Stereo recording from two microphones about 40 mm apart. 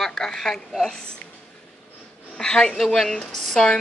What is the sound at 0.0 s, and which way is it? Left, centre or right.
Speech, centre.